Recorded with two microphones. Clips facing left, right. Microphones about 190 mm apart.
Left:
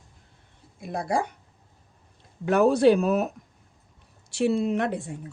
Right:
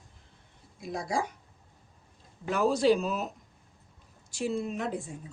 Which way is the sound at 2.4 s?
65° left (ahead or behind).